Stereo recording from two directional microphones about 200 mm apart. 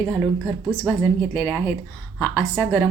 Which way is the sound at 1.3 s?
10° left (ahead or behind).